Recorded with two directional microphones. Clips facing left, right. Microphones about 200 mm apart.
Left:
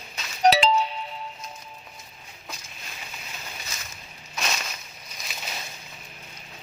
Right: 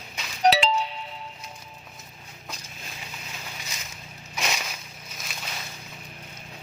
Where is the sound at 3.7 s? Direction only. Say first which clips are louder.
Even; 15° right (ahead or behind).